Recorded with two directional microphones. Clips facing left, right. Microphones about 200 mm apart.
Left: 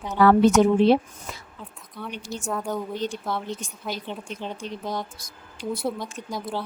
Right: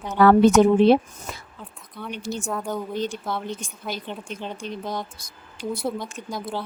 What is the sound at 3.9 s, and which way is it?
Speech, centre (ahead or behind).